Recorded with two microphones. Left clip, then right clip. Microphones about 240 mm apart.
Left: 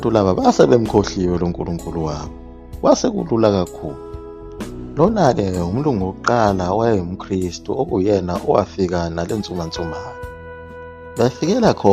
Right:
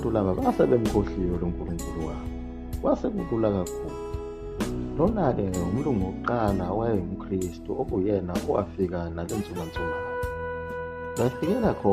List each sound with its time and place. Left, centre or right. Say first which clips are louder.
0.0 s speech: left 10 dB; left
2.8 s speech: left 11 dB; left
4.9 s speech: left 10 dB; left
11.2 s speech: left 9 dB; left